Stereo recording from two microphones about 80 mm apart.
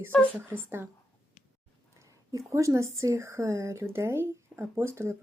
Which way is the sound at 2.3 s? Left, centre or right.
Right.